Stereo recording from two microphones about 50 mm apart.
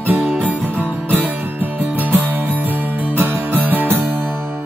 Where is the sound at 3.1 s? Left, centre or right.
Right.